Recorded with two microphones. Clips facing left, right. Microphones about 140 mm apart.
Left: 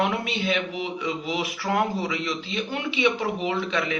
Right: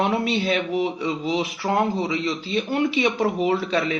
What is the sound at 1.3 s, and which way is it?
Speech, 25° right (ahead or behind).